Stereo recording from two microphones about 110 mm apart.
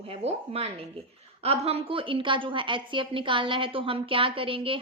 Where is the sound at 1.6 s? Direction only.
60° right (ahead or behind).